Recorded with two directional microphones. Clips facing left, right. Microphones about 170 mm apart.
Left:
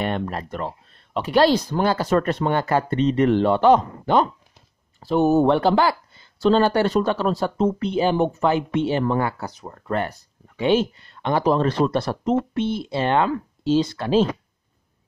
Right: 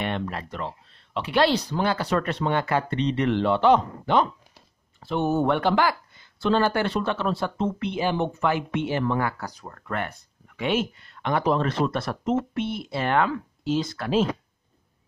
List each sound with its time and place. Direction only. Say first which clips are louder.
0.0 s speech: left 4 dB; 40° left (ahead or behind)
9.4 s speech: left 3 dB; 20° left (ahead or behind)
9.8 s speech: left 6 dB; 30° left (ahead or behind)